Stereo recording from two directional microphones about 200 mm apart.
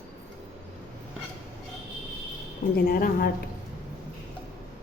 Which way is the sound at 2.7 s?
45° left (ahead or behind).